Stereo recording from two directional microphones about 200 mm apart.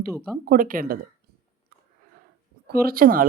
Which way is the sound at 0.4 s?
45° right (ahead or behind).